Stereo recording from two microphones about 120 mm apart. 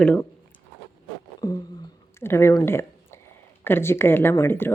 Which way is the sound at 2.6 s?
20° left (ahead or behind).